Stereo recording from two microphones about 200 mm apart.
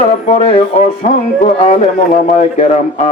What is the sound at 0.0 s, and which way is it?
Music, 35° left (ahead or behind).